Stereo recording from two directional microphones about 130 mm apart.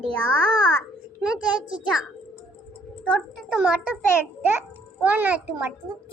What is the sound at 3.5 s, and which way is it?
Speech, 5° right (ahead or behind).